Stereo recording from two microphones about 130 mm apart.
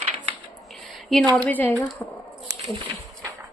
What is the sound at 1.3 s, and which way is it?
Speech, 10° left (ahead or behind).